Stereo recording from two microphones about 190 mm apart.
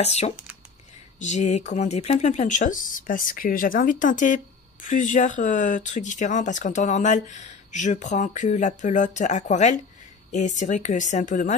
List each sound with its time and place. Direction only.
0.0 s speech: 35° left (ahead or behind)